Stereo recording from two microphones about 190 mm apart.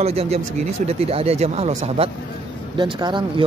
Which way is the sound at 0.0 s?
35° right (ahead or behind).